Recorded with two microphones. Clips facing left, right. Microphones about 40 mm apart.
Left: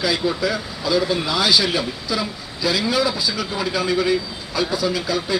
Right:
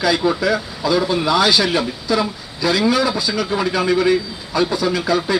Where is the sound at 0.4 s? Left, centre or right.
Centre.